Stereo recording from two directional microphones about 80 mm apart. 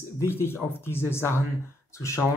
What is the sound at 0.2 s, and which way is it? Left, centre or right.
Speech, left.